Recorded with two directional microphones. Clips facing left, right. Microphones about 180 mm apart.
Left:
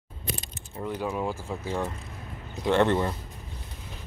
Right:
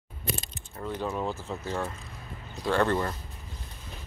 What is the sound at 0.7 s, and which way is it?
Speech, 10° left (ahead or behind).